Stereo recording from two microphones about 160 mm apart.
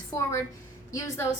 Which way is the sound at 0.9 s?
20° left (ahead or behind).